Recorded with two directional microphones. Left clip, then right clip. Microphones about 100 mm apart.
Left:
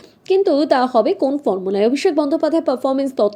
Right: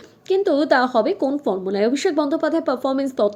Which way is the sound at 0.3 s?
25° left (ahead or behind).